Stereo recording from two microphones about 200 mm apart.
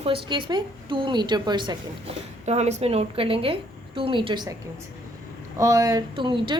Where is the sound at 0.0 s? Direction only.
25° right (ahead or behind).